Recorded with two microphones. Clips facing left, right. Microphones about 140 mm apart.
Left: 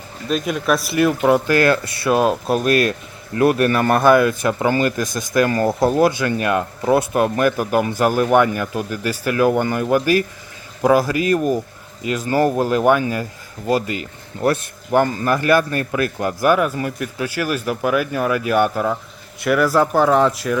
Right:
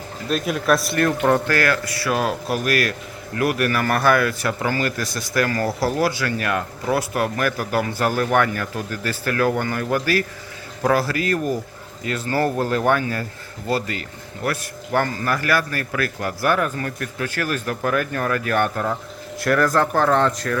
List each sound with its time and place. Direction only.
0.3 s speech: centre (ahead or behind)